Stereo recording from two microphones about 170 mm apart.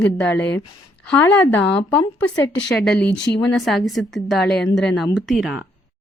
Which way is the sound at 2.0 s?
25° left (ahead or behind).